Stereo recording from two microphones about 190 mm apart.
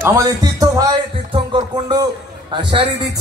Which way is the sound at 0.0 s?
15° right (ahead or behind).